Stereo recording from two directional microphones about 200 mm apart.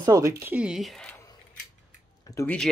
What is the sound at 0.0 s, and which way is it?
Speech, 15° right (ahead or behind).